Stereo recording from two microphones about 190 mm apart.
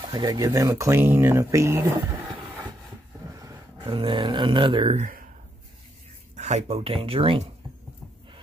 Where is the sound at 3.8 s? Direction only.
25° right (ahead or behind).